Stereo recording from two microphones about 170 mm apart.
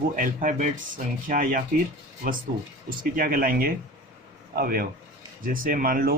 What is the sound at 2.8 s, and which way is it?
Speech, 60° right (ahead or behind).